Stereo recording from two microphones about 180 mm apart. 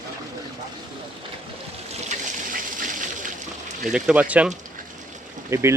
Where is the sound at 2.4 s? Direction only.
45° right (ahead or behind).